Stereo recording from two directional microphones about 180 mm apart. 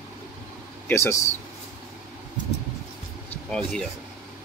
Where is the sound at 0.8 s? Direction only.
15° left (ahead or behind).